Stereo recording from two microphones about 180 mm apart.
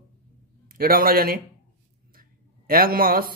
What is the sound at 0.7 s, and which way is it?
Speech, 55° right (ahead or behind).